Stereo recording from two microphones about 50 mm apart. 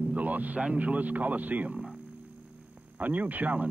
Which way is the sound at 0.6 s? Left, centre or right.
Right.